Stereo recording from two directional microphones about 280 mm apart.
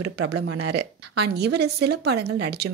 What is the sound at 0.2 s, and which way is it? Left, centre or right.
Speech, right.